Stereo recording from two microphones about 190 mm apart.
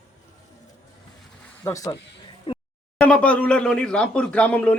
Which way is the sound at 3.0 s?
5° left (ahead or behind).